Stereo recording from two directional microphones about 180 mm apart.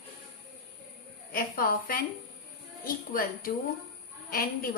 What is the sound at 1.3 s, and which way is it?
A woman's voice, 50° left (ahead or behind).